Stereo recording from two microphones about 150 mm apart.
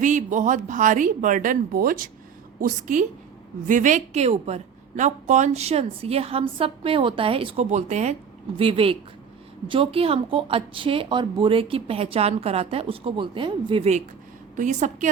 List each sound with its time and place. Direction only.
0.0 s a woman's voice: 55° right (ahead or behind); by 2.0 s 80° right
2.6 s a woman's voice: 60° right (ahead or behind)
8.5 s a woman's voice: 40° right (ahead or behind)
14.5 s a woman's voice: 55° right (ahead or behind)